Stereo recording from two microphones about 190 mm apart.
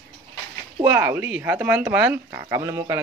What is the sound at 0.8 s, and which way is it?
Speech, 10° right (ahead or behind).